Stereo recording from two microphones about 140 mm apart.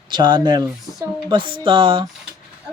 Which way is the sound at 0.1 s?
30° right (ahead or behind).